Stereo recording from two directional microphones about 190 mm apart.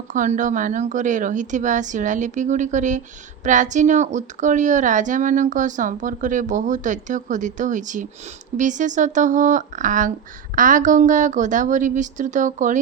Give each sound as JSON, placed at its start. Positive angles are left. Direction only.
{"t": 0.1, "sound": "speech", "side_deg": -40}